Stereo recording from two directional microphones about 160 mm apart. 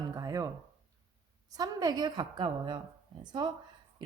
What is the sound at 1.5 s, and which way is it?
Speech, 25° right (ahead or behind).